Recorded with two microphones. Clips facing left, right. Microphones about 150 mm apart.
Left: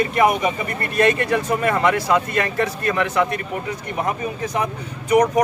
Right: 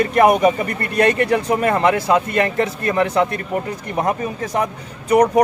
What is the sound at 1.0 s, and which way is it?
Speech, 30° right (ahead or behind).